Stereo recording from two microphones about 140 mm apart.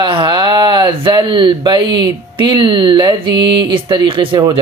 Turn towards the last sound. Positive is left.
turn(degrees=-35)  # may be behind; listen again after turning